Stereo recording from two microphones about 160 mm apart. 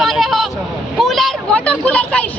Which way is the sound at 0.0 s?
Centre (ahead or behind).